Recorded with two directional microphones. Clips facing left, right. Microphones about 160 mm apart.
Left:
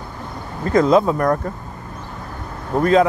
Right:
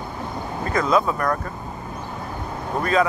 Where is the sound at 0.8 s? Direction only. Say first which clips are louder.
Left 4 dB; 30° left (ahead or behind).